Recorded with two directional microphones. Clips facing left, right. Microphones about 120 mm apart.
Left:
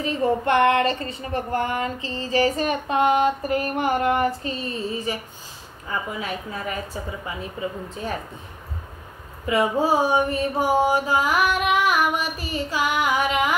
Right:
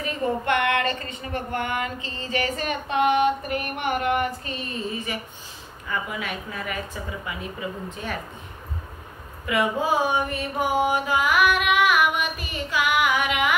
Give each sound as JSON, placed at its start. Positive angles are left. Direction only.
{"t": 0.0, "sound": "speech", "side_deg": 30}
{"t": 9.5, "sound": "speech", "side_deg": 35}